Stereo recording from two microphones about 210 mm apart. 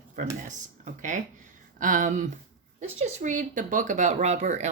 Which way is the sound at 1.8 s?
40° right (ahead or behind).